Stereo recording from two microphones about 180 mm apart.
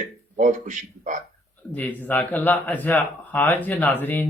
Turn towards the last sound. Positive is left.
turn(degrees=10)  # may be behind; listen again after turning